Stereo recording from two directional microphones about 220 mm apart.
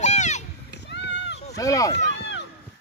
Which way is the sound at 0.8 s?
55° left (ahead or behind).